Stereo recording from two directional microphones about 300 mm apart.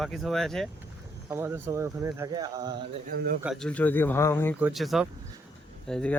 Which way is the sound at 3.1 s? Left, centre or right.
Right.